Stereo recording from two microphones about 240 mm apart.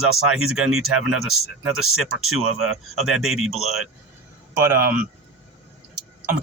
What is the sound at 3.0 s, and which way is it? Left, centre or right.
Speech, centre.